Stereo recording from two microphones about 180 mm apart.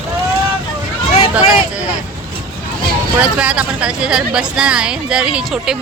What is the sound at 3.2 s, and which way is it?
A woman's voice, 5° right (ahead or behind).